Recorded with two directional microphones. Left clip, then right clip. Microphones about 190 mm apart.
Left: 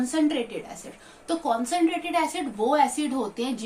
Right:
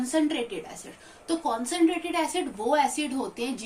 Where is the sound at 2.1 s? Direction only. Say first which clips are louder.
Left 3 dB; 30° left (ahead or behind).